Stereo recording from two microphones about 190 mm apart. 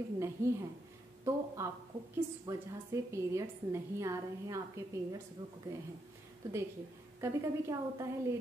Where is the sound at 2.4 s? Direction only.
15° right (ahead or behind).